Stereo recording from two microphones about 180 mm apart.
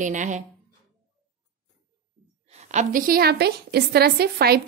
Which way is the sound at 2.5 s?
40° right (ahead or behind).